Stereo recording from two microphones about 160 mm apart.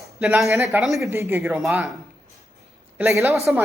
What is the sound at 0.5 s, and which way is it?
Speech, 15° right (ahead or behind).